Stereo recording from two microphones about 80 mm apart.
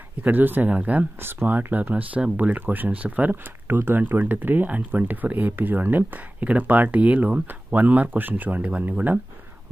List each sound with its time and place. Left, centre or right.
0.2 s speech: right